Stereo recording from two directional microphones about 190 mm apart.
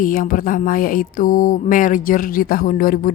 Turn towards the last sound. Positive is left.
turn(degrees=50)  # may be behind; listen again after turning